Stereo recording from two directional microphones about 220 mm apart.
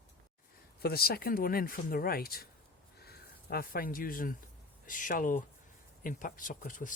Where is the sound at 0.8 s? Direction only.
45° left (ahead or behind).